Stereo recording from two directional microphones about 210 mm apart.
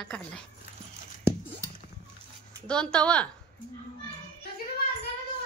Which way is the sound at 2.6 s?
5° left (ahead or behind).